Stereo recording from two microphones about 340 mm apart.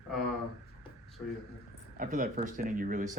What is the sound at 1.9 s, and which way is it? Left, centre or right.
Speech, right.